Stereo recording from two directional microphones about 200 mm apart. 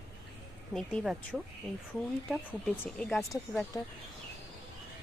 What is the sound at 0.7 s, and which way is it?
Speech, centre (ahead or behind).